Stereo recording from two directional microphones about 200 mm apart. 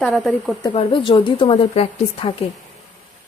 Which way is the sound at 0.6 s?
25° left (ahead or behind).